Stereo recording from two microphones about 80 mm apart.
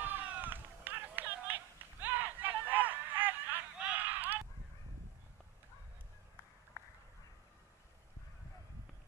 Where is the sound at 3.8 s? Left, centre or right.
Centre.